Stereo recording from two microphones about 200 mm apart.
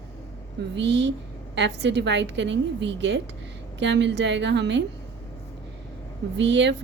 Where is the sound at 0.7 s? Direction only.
60° right (ahead or behind).